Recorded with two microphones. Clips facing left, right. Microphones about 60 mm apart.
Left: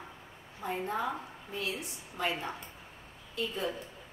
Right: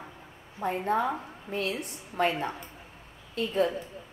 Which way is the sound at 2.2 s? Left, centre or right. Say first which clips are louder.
Right 7 dB; right.